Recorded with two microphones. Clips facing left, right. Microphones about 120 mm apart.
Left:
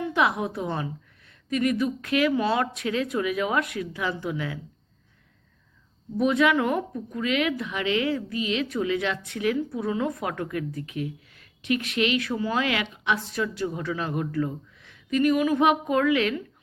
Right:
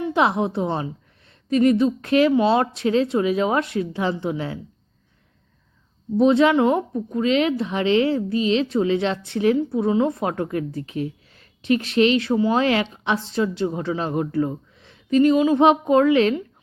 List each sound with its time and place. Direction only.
0.0 s a woman's voice: 30° right (ahead or behind)
6.1 s a woman's voice: 30° right (ahead or behind)